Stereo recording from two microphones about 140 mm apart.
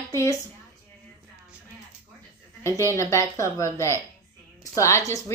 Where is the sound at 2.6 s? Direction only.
20° left (ahead or behind).